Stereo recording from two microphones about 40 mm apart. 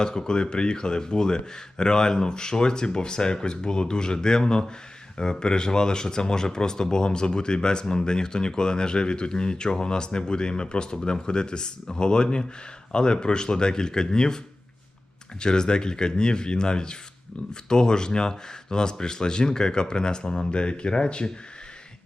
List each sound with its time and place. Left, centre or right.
0.0 s speech: centre
15.4 s speech: left